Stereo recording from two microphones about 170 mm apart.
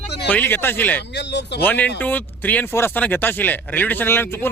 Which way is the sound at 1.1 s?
90° left.